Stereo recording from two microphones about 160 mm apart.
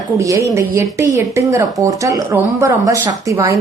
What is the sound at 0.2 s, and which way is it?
A woman's voice, 20° right (ahead or behind).